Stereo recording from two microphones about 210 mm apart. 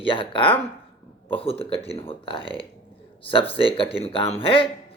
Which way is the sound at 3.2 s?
25° left (ahead or behind).